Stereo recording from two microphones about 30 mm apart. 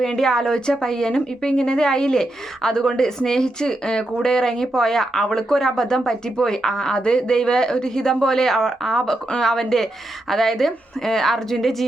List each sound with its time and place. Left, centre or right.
0.2 s speech: centre